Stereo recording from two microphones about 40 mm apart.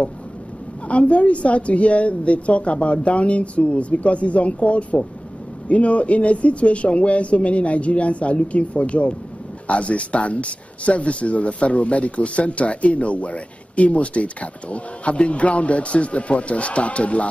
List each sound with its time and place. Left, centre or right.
0.8 s speech: left